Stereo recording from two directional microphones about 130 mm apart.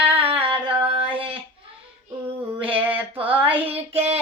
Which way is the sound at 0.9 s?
45° right (ahead or behind).